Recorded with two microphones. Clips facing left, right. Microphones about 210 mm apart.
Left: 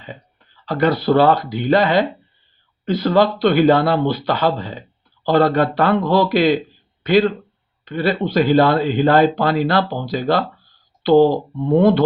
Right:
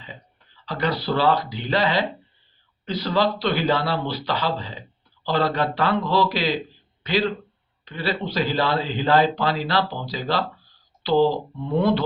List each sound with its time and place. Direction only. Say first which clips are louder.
0.6 s a man's voice: left 8 dB; 50° left (ahead or behind)